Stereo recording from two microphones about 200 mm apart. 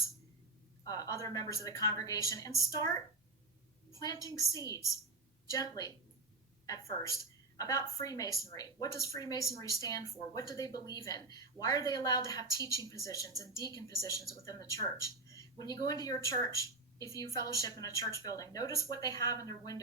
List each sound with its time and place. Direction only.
0.9 s speech: 20° left (ahead or behind)
4.0 s a woman's voice: 15° left (ahead or behind)